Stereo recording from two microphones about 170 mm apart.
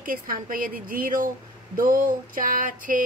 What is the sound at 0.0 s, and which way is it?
A woman's voice, 55° right (ahead or behind).